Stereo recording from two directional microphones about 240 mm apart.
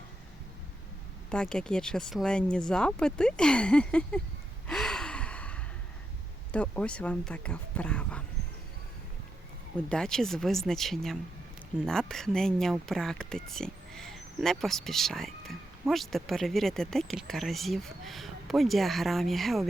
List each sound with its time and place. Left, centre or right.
1.3 s speech: centre
4.6 s gasp: centre
6.5 s speech: centre
9.9 s speech: centre